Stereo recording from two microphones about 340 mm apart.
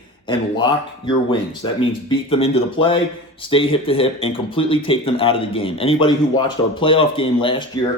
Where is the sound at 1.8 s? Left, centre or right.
Centre.